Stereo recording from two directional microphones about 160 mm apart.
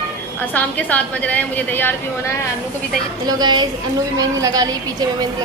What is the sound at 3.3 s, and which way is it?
A woman's voice, 25° right (ahead or behind).